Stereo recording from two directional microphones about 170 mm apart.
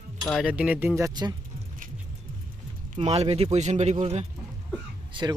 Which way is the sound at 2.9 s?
40° right (ahead or behind).